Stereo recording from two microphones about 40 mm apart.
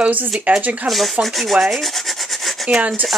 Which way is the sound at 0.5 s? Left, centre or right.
Right.